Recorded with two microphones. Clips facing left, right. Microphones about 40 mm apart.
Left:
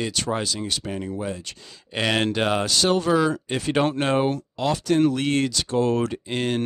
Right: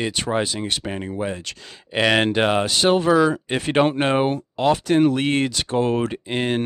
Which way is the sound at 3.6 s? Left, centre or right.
Right.